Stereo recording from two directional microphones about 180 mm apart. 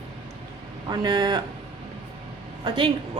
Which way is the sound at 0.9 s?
25° right (ahead or behind).